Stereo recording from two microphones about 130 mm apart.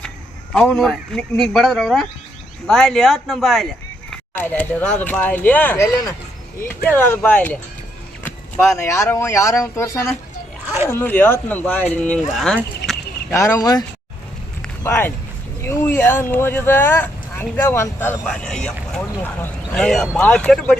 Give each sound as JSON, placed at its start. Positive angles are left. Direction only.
{"t": 0.5, "sound": "speech", "side_deg": 5}
{"t": 4.4, "sound": "speech", "side_deg": 15}
{"t": 8.7, "sound": "speech", "side_deg": 20}
{"t": 13.3, "sound": "speech", "side_deg": 20}
{"t": 14.8, "sound": "speech", "side_deg": 20}
{"t": 18.3, "sound": "speech", "side_deg": 5}